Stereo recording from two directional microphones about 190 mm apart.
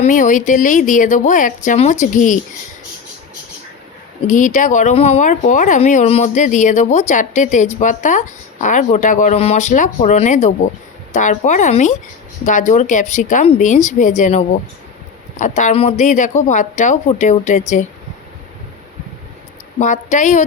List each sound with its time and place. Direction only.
0.0 s speech: 40° left (ahead or behind)
4.3 s speech: 40° left (ahead or behind)
19.8 s speech: 40° left (ahead or behind)